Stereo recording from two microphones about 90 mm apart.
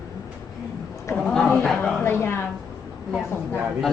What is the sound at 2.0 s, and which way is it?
Speech, 25° left (ahead or behind).